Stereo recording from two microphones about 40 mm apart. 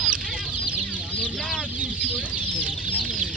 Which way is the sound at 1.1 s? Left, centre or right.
Left.